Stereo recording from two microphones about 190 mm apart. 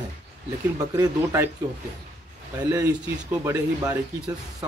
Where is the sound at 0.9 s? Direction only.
15° right (ahead or behind).